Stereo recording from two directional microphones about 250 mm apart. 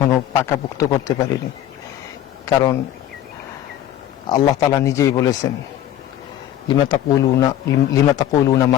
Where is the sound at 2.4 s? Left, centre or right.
Centre.